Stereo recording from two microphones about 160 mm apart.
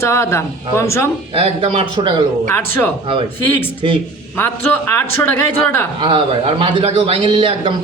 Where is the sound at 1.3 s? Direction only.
40° right (ahead or behind).